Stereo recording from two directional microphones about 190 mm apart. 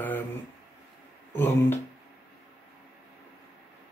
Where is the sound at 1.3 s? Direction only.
10° left (ahead or behind).